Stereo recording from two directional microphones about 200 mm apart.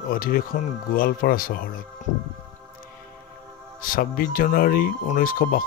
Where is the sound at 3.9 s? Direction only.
45° left (ahead or behind).